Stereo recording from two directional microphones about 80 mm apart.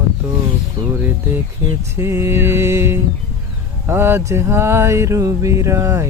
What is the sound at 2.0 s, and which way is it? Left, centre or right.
Mantra, right.